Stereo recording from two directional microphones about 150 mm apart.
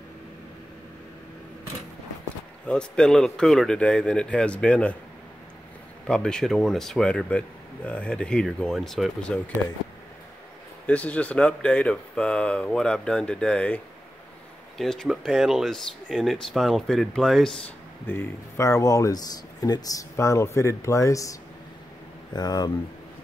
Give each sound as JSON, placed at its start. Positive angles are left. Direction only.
{"t": 2.7, "sound": "speech", "side_deg": 5}
{"t": 6.0, "sound": "speech", "side_deg": 5}
{"t": 10.9, "sound": "speech", "side_deg": 10}
{"t": 14.8, "sound": "speech", "side_deg": 0}
{"t": 18.0, "sound": "speech", "side_deg": 15}